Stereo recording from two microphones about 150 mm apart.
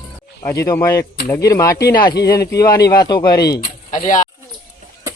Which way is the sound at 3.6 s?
60° left (ahead or behind).